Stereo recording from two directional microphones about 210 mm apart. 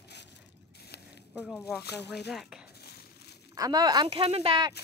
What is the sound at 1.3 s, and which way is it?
Speech, 5° right (ahead or behind).